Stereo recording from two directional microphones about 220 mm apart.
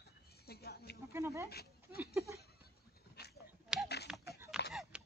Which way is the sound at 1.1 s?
15° right (ahead or behind).